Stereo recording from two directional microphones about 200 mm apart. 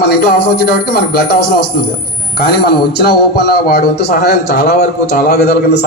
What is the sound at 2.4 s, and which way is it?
Speech, 55° left (ahead or behind).